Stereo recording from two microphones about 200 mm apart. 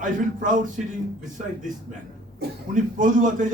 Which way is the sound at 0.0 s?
40° right (ahead or behind).